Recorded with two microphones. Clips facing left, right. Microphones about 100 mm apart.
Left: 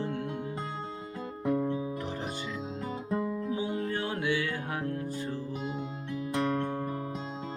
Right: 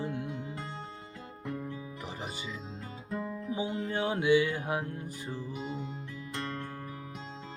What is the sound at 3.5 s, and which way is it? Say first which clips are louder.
Music: right 3 dB; 20° right (ahead or behind).